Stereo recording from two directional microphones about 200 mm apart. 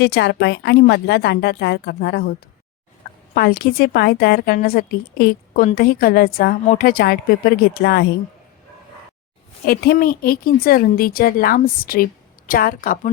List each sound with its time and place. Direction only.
0.0 s speech: 60° left (ahead or behind)
3.3 s a woman's voice: 50° left (ahead or behind)
9.6 s a woman's voice: 50° left (ahead or behind)